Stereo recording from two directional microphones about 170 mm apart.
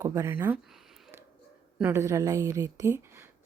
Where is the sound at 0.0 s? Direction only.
20° right (ahead or behind).